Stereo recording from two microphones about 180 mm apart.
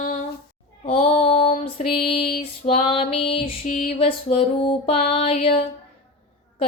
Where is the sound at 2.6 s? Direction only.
30° left (ahead or behind).